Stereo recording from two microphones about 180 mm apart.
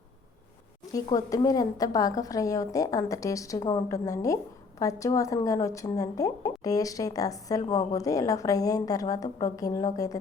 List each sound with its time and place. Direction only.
0.9 s speech: 20° left (ahead or behind)